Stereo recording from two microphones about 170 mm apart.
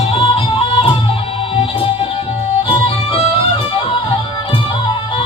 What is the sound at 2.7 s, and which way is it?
Music, 35° left (ahead or behind).